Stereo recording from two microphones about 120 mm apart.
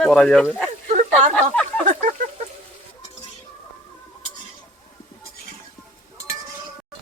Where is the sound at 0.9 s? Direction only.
75° right (ahead or behind).